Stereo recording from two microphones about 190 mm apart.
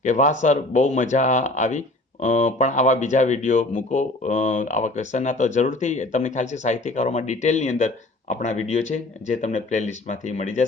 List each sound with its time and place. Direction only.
0.0 s speech: 40° left (ahead or behind)